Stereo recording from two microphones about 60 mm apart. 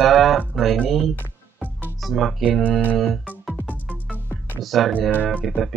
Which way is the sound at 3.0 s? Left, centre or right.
Centre.